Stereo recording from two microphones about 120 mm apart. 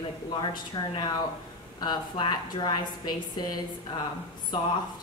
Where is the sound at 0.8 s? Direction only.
40° left (ahead or behind).